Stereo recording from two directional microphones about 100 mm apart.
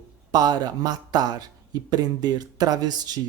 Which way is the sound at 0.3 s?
40° right (ahead or behind).